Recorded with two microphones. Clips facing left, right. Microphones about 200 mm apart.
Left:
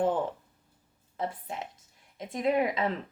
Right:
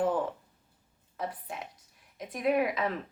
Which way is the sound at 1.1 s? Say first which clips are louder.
Left 2 dB; 25° left (ahead or behind).